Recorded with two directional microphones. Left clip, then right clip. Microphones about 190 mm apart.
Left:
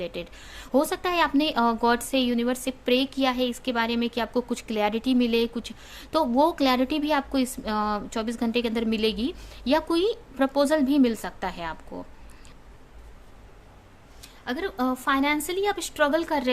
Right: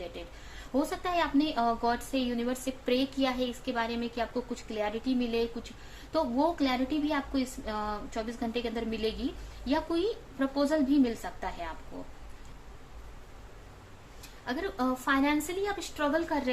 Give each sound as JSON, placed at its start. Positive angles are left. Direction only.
{"t": 0.7, "sound": "a woman's voice", "side_deg": 60}
{"t": 14.4, "sound": "a woman's voice", "side_deg": 40}